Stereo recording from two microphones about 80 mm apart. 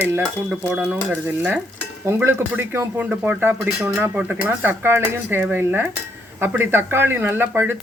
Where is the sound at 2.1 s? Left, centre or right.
Right; by 4.7 s centre.